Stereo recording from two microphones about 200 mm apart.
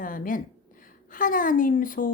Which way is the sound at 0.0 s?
45° left (ahead or behind).